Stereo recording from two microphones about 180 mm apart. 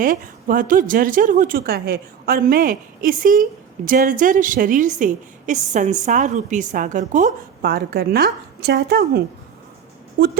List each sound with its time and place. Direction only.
0.0 s a woman's voice: 50° right (ahead or behind)
7.6 s a woman's voice: 60° right (ahead or behind)